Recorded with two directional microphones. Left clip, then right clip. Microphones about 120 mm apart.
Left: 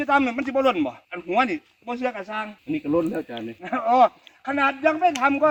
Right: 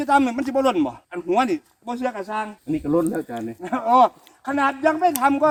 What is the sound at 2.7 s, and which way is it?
Speech, 35° right (ahead or behind).